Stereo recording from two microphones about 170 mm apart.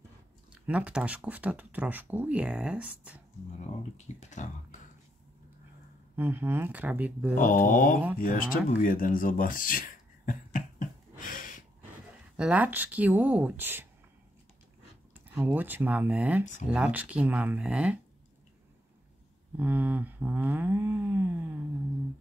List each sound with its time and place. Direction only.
0.5 s speech: 5° right (ahead or behind)
3.5 s speech: 40° left (ahead or behind)
6.1 s speech: 10° right (ahead or behind)
7.3 s speech: 50° left (ahead or behind)
8.2 s a sound: 55° left (ahead or behind)
12.4 s speech: 10° right (ahead or behind)
15.1 s speech: 10° right (ahead or behind)
19.5 s speech: 10° right (ahead or behind)